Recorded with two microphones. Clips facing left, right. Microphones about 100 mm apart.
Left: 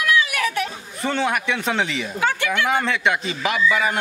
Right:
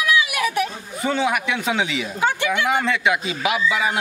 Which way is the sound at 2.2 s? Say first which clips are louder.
Right 1 dB; 15° right (ahead or behind).